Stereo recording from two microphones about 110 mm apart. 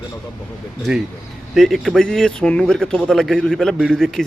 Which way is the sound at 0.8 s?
5° right (ahead or behind).